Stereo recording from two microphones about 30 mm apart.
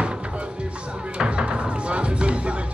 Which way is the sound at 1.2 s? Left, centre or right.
Right.